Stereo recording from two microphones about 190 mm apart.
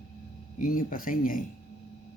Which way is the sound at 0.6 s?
45° left (ahead or behind).